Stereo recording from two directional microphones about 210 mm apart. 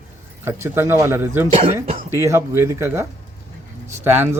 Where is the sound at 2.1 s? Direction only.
10° right (ahead or behind).